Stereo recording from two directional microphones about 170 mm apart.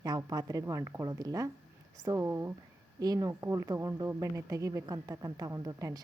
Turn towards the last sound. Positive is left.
turn(degrees=-20)  # may be behind; listen again after turning